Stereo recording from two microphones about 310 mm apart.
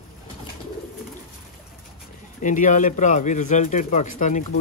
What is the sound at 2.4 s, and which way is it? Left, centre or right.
Speech, left.